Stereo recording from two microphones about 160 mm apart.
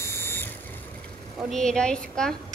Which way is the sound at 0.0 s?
15° left (ahead or behind).